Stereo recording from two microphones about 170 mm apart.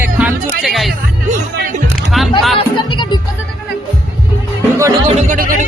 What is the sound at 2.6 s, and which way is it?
Music, 30° left (ahead or behind).